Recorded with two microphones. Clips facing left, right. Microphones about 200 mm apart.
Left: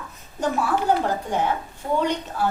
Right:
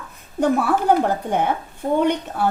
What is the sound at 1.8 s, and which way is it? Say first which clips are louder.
Speech: right 4 dB; 40° right (ahead or behind).